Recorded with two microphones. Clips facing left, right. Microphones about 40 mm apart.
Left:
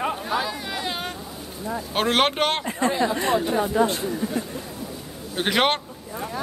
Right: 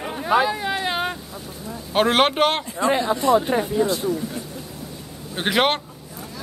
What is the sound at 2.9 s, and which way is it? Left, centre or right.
Speech, right.